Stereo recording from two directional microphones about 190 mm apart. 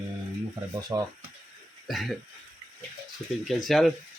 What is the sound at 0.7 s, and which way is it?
Speech, 20° right (ahead or behind).